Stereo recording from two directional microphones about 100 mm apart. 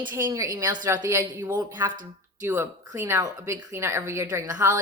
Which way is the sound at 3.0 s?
25° right (ahead or behind).